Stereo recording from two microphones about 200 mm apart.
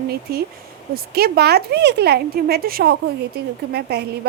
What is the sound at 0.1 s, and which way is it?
A woman's voice, 50° right (ahead or behind).